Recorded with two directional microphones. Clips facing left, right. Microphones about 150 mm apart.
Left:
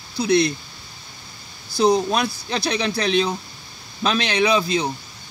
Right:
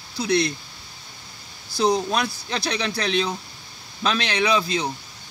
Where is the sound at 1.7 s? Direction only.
20° left (ahead or behind).